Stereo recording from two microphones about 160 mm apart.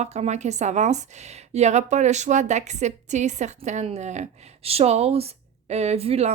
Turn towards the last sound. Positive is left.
turn(degrees=-40)  # may be behind; listen again after turning